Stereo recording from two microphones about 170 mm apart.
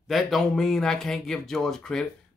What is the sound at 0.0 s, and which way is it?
Speech, centre (ahead or behind).